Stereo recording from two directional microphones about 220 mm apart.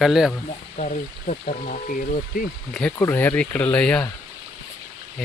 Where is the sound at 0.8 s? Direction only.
35° left (ahead or behind).